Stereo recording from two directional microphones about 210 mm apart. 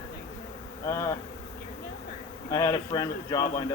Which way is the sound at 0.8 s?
15° left (ahead or behind).